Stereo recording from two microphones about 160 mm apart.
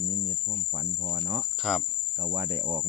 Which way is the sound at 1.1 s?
30° right (ahead or behind).